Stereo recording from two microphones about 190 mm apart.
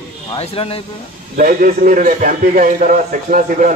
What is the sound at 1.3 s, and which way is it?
A man's voice, 45° right (ahead or behind).